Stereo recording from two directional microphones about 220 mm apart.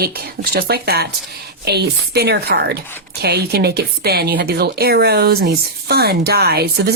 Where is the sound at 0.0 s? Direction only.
45° right (ahead or behind).